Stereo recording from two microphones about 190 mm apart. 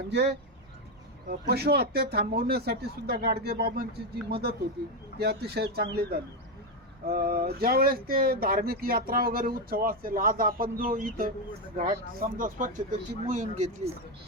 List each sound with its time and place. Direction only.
0.1 s speech: 65° right (ahead or behind); by 13.9 s 40° right (ahead or behind)